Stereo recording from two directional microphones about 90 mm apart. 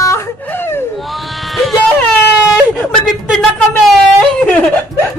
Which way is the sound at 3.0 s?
5° left (ahead or behind).